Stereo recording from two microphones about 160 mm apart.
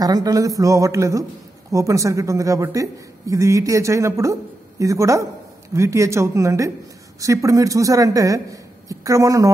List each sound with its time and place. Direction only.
0.0 s speech: 25° right (ahead or behind)